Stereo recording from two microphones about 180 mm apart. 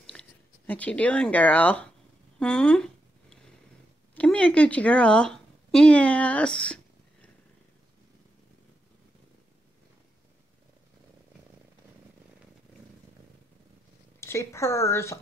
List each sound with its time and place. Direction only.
0.0 s speech: 5° left (ahead or behind)
2.3 s a sound: 5° left (ahead or behind)
4.1 s a woman's voice: 5° left (ahead or behind)
14.2 s a woman's voice: 15° left (ahead or behind)